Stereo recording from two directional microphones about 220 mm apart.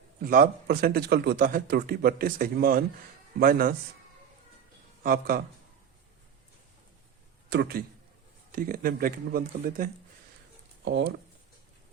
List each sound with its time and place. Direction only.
0.2 s speech: 40° right (ahead or behind)
5.0 s speech: 40° right (ahead or behind)
7.5 s speech: 45° right (ahead or behind)
10.8 s speech: 55° right (ahead or behind)